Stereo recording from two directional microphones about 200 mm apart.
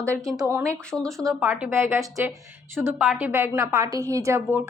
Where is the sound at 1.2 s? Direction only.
10° right (ahead or behind).